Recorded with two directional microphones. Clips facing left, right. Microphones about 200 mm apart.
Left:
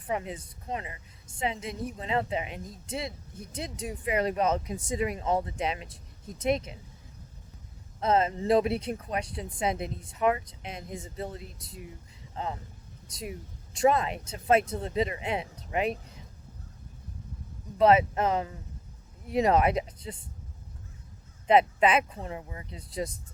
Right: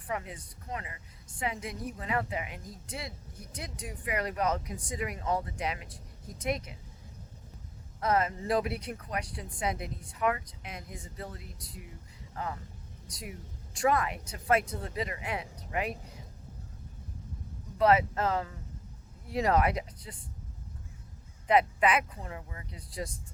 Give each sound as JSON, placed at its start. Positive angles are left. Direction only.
{"t": 0.1, "sound": "speech", "side_deg": 25}
{"t": 8.0, "sound": "speech", "side_deg": 25}
{"t": 17.7, "sound": "speech", "side_deg": 20}
{"t": 21.4, "sound": "speech", "side_deg": 25}